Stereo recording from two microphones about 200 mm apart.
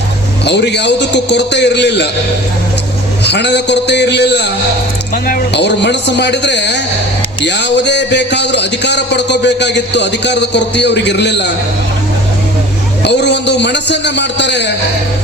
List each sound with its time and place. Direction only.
0.4 s a man's voice: 60° left (ahead or behind)
3.2 s a man's voice: 60° left (ahead or behind)
5.1 s a man's voice: 45° left (ahead or behind)
13.1 s a man's voice: 60° left (ahead or behind)